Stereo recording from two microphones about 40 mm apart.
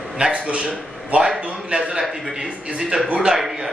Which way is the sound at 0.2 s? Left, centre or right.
Right.